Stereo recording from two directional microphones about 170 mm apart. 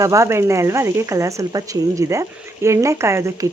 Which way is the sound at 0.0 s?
15° right (ahead or behind).